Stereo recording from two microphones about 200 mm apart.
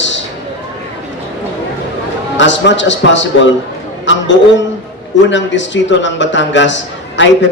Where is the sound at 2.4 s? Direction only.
65° left (ahead or behind).